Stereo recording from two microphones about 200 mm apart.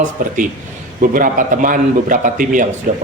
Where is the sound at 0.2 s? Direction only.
40° right (ahead or behind).